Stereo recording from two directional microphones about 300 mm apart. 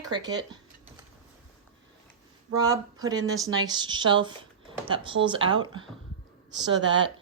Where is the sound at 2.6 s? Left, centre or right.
Centre.